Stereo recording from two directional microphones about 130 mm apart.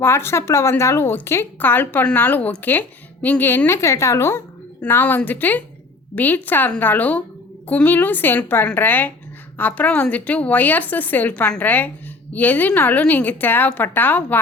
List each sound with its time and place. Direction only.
0.0 s speech: 20° left (ahead or behind)